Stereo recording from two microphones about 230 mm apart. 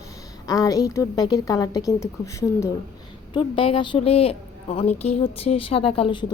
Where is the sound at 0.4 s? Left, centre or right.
Centre.